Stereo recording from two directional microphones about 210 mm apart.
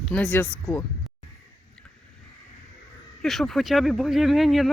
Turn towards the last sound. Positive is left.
turn(degrees=0)  # may be behind; listen again after turning